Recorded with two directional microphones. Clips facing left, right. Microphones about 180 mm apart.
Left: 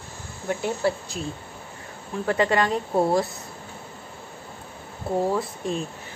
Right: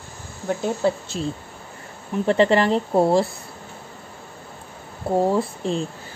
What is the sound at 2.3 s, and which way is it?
A woman's voice, 30° right (ahead or behind).